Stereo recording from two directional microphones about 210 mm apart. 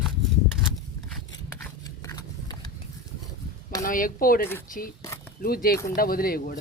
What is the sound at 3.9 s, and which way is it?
Speech, 40° left (ahead or behind).